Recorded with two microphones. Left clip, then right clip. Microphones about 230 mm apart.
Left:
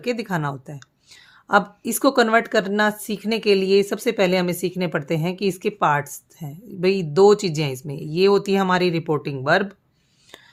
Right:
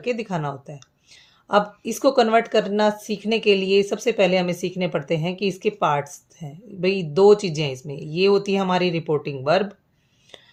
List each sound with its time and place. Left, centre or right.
0.0 s a woman's voice: left